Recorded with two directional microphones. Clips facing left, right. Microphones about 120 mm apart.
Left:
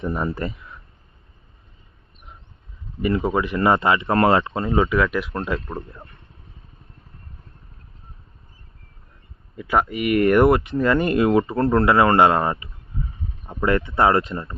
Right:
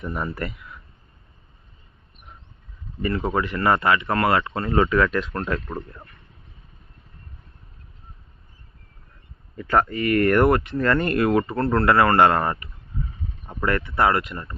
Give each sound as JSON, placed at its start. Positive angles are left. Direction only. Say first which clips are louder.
{"t": 0.0, "sound": "speech", "louder": "left 4 dB", "side_deg": 25}
{"t": 3.0, "sound": "speech", "louder": "left 3 dB", "side_deg": 15}
{"t": 4.7, "sound": "speech", "louder": "even", "side_deg": 5}
{"t": 9.6, "sound": "speech", "louder": "even", "side_deg": 10}